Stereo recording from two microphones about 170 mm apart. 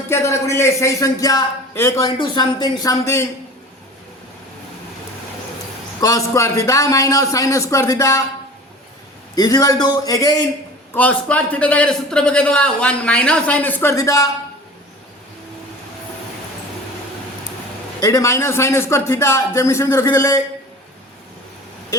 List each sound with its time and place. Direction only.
0.1 s a man's voice: 15° left (ahead or behind)
6.0 s a man's voice: 20° left (ahead or behind)
9.3 s a man's voice: 20° left (ahead or behind)
10.9 s a man's voice: 10° left (ahead or behind)
18.0 s a man's voice: 15° left (ahead or behind)